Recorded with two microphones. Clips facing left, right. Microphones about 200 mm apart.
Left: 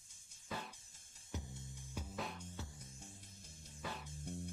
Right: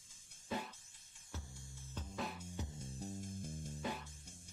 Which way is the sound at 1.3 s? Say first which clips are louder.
Left 4 dB; 20° left (ahead or behind).